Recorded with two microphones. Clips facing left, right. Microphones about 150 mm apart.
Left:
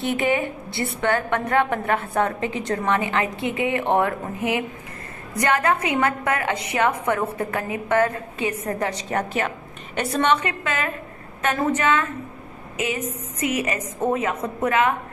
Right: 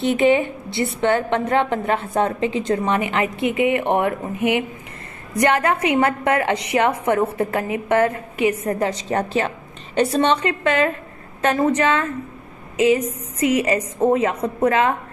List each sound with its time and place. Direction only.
0.0 s a woman's voice: 20° right (ahead or behind)